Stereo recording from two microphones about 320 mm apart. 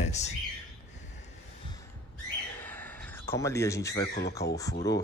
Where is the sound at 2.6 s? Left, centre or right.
Centre.